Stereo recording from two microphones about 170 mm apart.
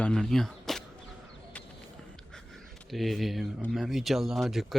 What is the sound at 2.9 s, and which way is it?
Speech, centre (ahead or behind).